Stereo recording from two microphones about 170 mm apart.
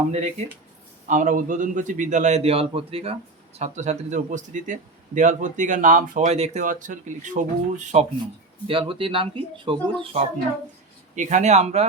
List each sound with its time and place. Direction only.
0.1 s speech: 40° right (ahead or behind)
8.6 s speech: 30° right (ahead or behind)
11.1 s speech: 45° right (ahead or behind)